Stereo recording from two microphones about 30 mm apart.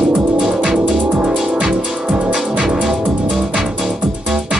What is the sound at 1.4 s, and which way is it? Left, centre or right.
Music, right.